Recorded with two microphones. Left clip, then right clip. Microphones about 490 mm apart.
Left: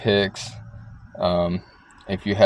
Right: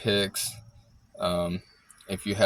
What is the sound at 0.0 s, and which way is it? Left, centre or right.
Speech, right.